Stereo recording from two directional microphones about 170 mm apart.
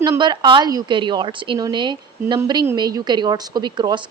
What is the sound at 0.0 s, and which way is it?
A woman's voice, 25° right (ahead or behind).